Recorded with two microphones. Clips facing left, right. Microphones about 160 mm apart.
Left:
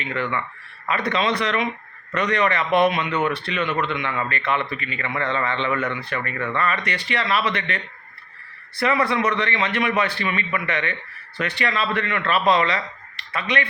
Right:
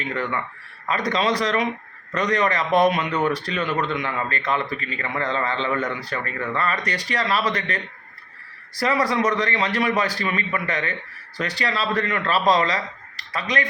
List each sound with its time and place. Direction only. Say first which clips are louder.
0.0 s speech: even; 35° right (ahead or behind)